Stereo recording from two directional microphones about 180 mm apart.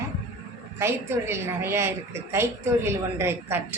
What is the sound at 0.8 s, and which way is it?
A woman's voice, 15° right (ahead or behind).